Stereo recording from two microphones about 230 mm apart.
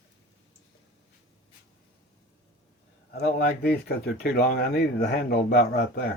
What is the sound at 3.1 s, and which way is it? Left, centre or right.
Speech, left.